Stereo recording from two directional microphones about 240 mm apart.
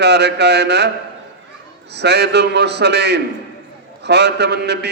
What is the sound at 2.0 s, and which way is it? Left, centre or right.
A man's voice, right.